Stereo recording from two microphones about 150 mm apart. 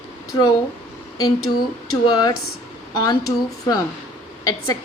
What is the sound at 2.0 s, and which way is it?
A woman's voice, 25° left (ahead or behind).